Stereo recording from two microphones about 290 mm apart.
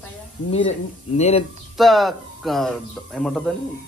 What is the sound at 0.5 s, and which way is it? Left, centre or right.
Speech, left.